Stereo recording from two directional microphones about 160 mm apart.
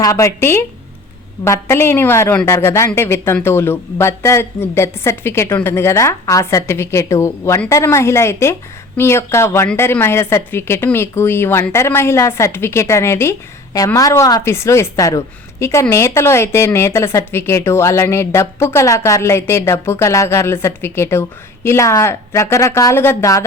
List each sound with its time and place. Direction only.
0.0 s a woman's voice: 20° left (ahead or behind)